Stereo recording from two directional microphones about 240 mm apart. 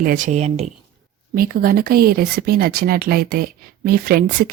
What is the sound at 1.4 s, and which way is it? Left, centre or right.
Speech, right.